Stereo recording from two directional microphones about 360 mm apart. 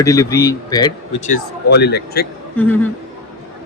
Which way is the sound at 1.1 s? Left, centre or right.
Left.